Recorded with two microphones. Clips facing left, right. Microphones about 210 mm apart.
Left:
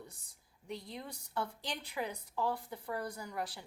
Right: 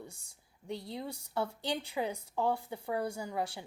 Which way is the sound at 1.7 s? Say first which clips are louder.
Right 5 dB; 30° right (ahead or behind).